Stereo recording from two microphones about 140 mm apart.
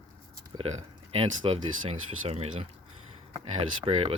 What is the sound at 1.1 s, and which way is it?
Speech, 45° right (ahead or behind).